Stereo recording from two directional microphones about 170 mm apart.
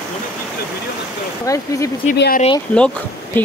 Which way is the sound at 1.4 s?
20° left (ahead or behind).